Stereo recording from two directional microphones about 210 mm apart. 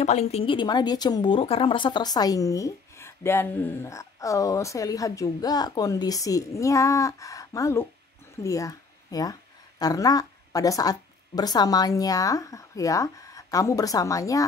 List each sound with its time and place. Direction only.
0.0 s a woman's voice: 30° left (ahead or behind); by 14.4 s 15° left (ahead or behind)